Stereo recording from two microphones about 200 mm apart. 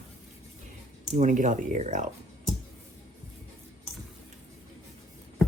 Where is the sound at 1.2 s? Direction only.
40° right (ahead or behind).